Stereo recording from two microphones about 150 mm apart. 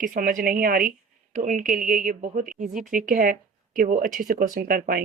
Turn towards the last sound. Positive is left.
turn(degrees=-70)  # may be behind; listen again after turning